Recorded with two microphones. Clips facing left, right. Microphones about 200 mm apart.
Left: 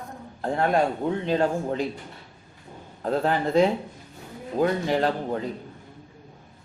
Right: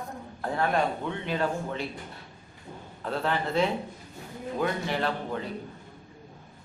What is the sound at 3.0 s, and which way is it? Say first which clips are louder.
Speech: left 5 dB; 40° left (ahead or behind).